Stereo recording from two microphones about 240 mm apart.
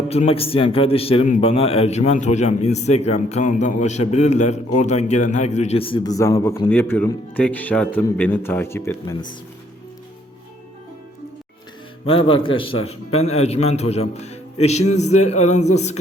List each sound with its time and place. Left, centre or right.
0.1 s a man's voice: left
12.0 s a man's voice: left